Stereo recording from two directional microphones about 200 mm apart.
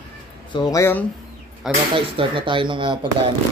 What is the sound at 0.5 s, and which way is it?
Speech, 20° left (ahead or behind).